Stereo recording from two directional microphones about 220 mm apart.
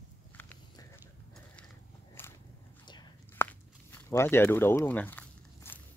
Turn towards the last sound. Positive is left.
turn(degrees=10)  # may be behind; listen again after turning